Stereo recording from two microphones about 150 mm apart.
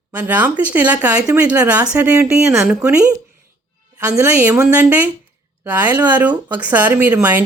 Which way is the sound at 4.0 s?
15° right (ahead or behind).